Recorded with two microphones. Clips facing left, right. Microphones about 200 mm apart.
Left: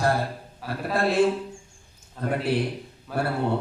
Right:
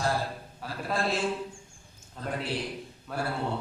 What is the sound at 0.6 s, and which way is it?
Speech, centre (ahead or behind).